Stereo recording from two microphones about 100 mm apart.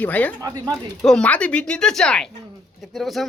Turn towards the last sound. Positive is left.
turn(degrees=0)  # may be behind; listen again after turning